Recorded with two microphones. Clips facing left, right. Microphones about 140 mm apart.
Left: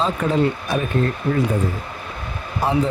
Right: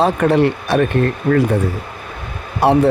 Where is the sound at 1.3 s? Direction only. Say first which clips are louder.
Right 8 dB; 55° right (ahead or behind).